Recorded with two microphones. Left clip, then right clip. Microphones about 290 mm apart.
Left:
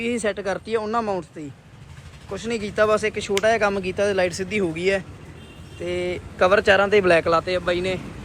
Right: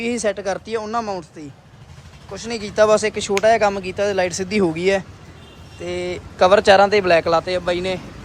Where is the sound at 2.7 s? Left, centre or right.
Centre.